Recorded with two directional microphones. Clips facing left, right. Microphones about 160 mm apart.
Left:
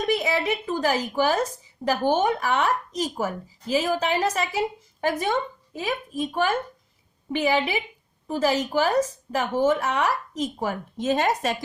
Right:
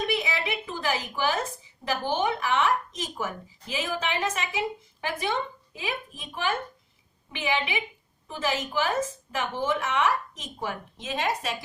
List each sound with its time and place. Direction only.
0.0 s speech: 40° left (ahead or behind)